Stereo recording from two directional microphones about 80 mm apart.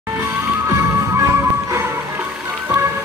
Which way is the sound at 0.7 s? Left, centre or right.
Right.